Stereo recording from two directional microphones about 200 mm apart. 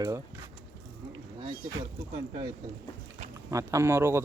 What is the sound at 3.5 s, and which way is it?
Speech, 15° right (ahead or behind).